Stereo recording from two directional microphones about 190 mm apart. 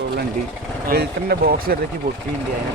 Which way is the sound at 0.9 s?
55° right (ahead or behind).